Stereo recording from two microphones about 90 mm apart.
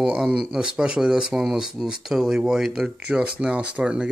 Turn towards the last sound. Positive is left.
turn(degrees=-15)  # may be behind; listen again after turning